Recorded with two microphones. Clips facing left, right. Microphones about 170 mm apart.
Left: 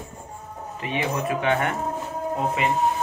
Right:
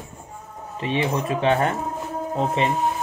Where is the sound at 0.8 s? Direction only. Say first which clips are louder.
Right 3 dB; 25° right (ahead or behind).